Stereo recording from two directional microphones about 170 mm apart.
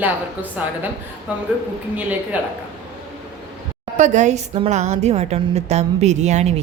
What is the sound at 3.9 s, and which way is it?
A woman's voice, 45° right (ahead or behind).